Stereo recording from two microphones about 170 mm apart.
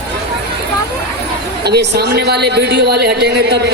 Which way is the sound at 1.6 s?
75° right (ahead or behind).